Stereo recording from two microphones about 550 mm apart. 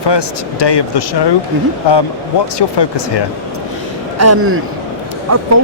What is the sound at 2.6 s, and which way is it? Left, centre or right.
Speech, left.